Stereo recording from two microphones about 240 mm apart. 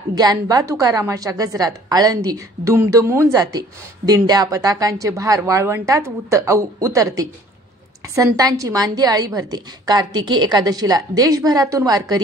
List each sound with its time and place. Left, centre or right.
0.1 s a woman's voice: centre